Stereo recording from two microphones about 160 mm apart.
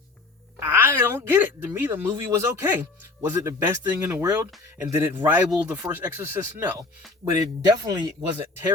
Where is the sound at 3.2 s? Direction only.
15° right (ahead or behind).